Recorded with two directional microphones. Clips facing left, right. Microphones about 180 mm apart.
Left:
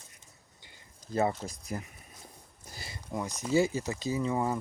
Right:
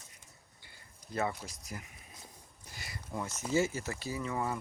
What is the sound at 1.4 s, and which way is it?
Speech, 40° left (ahead or behind).